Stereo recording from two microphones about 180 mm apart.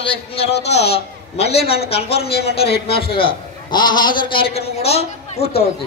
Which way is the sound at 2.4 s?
35° left (ahead or behind).